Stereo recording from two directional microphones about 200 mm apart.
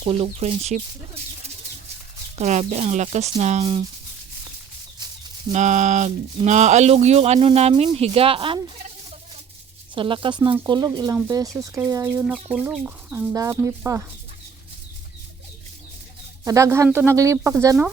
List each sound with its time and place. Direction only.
0.0 s speech: 25° right (ahead or behind)
2.4 s speech: 35° right (ahead or behind)
5.5 s speech: 35° right (ahead or behind)
9.9 s speech: 25° right (ahead or behind)
16.4 s speech: 15° right (ahead or behind)